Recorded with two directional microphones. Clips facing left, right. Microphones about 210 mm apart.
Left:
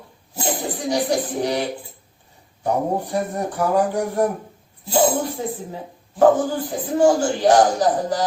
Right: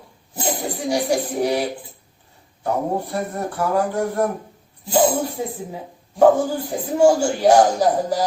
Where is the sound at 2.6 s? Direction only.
15° left (ahead or behind).